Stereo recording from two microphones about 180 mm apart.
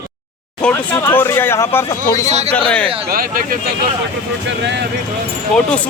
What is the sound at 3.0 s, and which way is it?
Speech, 55° right (ahead or behind).